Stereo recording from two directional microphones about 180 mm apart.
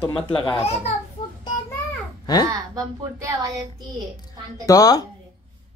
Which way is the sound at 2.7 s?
15° right (ahead or behind).